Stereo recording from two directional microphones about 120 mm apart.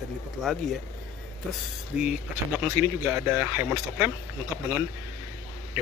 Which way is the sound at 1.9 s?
10° right (ahead or behind).